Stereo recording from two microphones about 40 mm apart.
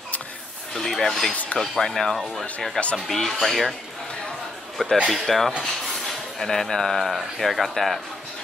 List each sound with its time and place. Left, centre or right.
0.7 s speech: centre
1.3 s speech: left
1.6 s speech: centre
2.1 s speech: centre
2.8 s speech: centre
4.8 s speech: centre